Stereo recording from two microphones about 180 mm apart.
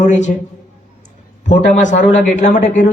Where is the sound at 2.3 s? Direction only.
45° left (ahead or behind).